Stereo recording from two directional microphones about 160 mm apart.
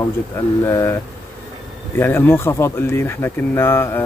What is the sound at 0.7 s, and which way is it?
Speech, 20° left (ahead or behind).